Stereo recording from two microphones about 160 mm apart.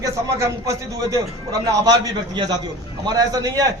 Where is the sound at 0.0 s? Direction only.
20° right (ahead or behind).